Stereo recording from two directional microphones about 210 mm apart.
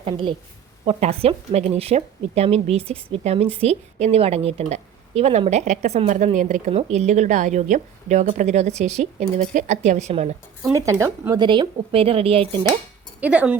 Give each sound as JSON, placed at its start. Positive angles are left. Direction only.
{"t": 0.0, "sound": "speech", "side_deg": -25}
{"t": 10.6, "sound": "speech", "side_deg": -15}
{"t": 13.1, "sound": "speech", "side_deg": -5}